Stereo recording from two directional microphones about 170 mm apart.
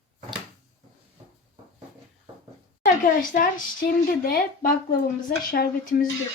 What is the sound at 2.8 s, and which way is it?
Speech, 50° left (ahead or behind).